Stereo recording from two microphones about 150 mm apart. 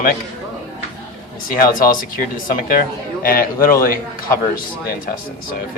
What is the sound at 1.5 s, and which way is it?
Speech, 70° left (ahead or behind).